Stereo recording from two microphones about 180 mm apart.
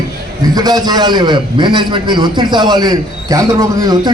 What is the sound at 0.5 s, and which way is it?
A man's voice, 20° right (ahead or behind).